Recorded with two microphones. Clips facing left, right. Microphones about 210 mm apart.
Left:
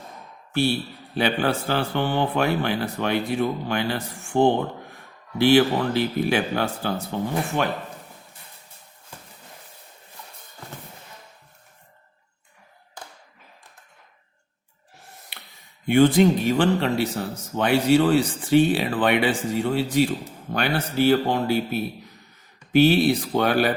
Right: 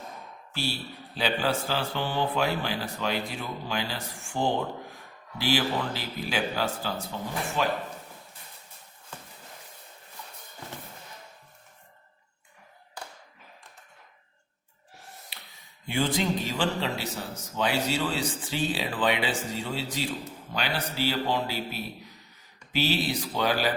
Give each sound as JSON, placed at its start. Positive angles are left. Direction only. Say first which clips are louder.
{"t": 0.5, "sound": "a man's voice", "louder": "left 11 dB", "side_deg": 60}
{"t": 15.9, "sound": "a man's voice", "louder": "left 11 dB", "side_deg": 60}